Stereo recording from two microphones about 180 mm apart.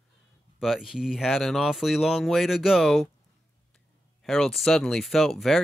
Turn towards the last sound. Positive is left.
turn(degrees=0)  # may be behind; listen again after turning